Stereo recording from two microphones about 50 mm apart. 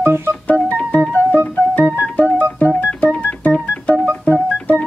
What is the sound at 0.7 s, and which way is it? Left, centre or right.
Music, left.